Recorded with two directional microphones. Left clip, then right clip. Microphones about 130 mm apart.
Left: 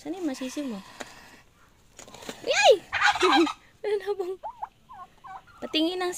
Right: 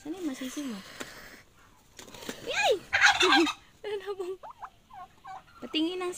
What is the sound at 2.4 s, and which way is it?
Turkey, 50° left (ahead or behind).